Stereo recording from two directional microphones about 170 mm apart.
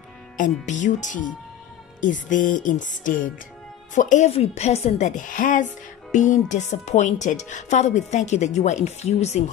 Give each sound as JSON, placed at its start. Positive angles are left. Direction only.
{"t": 0.4, "sound": "a woman's voice", "side_deg": 45}